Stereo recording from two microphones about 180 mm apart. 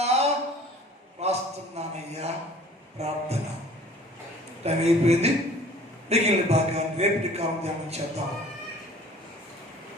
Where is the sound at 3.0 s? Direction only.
35° right (ahead or behind).